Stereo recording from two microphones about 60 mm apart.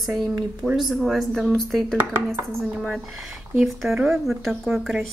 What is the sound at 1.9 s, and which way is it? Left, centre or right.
Dishes, right.